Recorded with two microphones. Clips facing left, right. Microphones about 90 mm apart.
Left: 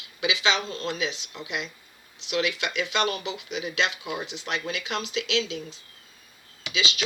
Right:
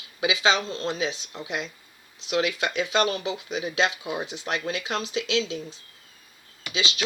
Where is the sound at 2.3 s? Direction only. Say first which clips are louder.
Right 2 dB; 35° right (ahead or behind).